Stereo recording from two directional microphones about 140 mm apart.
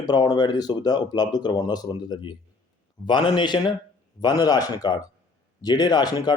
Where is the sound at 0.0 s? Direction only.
30° left (ahead or behind).